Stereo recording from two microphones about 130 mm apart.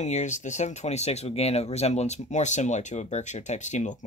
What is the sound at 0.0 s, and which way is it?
Speech, 65° left (ahead or behind).